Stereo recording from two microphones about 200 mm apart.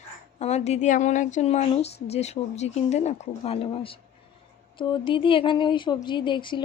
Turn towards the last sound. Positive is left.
turn(degrees=25)  # may be behind; listen again after turning